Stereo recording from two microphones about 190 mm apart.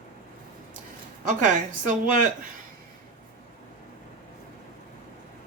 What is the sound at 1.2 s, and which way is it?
Speech, 40° right (ahead or behind).